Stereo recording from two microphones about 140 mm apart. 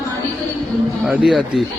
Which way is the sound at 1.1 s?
Centre (ahead or behind).